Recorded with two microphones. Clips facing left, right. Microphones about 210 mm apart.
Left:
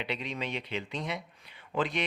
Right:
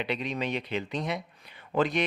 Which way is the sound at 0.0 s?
45° right (ahead or behind).